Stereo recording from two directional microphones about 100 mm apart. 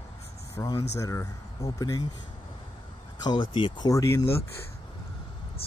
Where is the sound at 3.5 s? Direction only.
55° left (ahead or behind).